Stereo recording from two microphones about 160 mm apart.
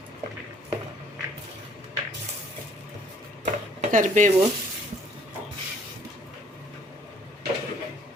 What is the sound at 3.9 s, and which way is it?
Speech, 50° right (ahead or behind).